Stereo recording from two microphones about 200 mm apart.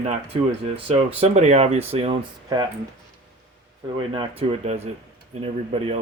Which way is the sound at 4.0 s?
25° right (ahead or behind).